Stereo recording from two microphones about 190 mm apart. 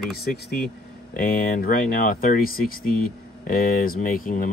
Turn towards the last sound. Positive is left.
turn(degrees=45)  # may be behind; listen again after turning